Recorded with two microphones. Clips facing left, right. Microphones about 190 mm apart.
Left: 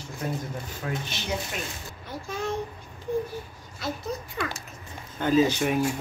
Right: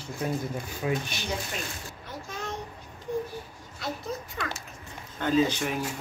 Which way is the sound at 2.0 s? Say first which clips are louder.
Left 6 dB; 10° left (ahead or behind).